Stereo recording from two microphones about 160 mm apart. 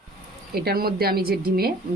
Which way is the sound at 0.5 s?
75° right (ahead or behind).